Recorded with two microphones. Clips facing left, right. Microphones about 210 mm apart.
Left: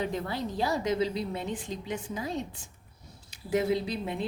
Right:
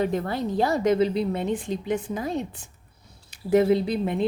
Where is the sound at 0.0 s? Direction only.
50° right (ahead or behind).